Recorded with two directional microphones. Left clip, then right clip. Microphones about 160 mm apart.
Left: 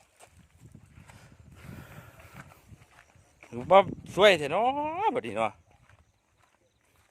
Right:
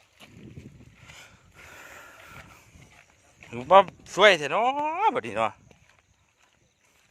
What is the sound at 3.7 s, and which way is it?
Speech, 25° left (ahead or behind).